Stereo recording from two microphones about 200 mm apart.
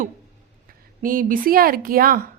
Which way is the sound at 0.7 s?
45° right (ahead or behind).